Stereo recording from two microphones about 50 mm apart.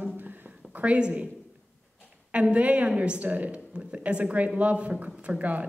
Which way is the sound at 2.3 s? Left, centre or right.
Right.